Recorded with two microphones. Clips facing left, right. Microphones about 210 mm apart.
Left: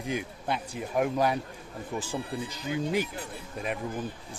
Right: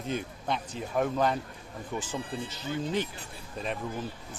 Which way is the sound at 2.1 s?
20° right (ahead or behind).